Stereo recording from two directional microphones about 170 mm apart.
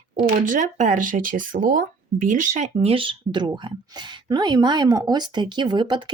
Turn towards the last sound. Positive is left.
turn(degrees=-25)  # may be behind; listen again after turning